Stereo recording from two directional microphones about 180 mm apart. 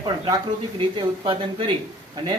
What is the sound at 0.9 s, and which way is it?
Speech, 25° right (ahead or behind).